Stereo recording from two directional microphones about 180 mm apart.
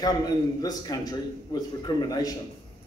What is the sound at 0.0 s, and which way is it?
A man's voice, 20° left (ahead or behind).